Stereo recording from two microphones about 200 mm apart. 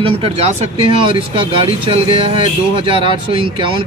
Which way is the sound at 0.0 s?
30° right (ahead or behind).